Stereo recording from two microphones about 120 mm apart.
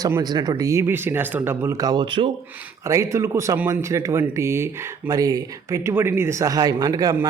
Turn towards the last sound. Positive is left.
turn(degrees=-30)  # may be behind; listen again after turning